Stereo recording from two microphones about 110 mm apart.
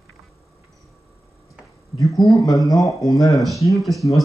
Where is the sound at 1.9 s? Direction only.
30° left (ahead or behind).